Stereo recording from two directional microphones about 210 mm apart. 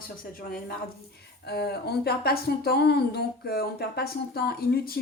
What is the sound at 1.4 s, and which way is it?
Speech, 50° left (ahead or behind).